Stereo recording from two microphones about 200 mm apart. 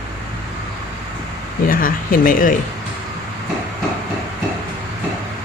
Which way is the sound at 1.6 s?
45° left (ahead or behind).